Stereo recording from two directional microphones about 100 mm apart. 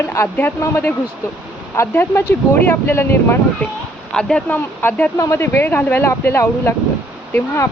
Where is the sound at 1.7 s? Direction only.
25° left (ahead or behind).